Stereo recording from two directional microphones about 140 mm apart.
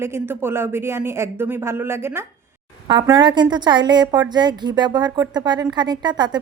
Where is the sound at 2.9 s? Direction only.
30° right (ahead or behind).